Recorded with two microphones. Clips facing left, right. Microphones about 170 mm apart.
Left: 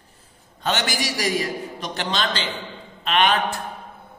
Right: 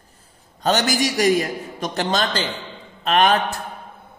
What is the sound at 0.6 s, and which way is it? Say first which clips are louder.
A man's voice: right 5 dB; 40° right (ahead or behind).